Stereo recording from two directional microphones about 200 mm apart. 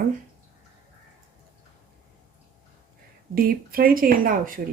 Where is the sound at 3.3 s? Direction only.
45° right (ahead or behind).